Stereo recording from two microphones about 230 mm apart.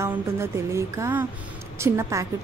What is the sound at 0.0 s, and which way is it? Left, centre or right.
A woman's voice, centre.